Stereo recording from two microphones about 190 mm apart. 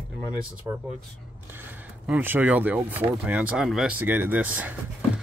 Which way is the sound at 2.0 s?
10° right (ahead or behind).